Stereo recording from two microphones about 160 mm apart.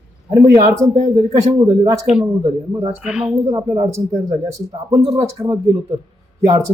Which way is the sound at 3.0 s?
5° right (ahead or behind).